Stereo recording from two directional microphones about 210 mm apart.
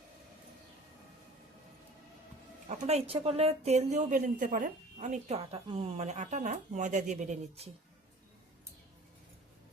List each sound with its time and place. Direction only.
2.6 s speech: 30° right (ahead or behind)